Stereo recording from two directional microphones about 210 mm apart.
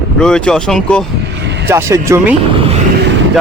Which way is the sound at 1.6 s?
15° right (ahead or behind).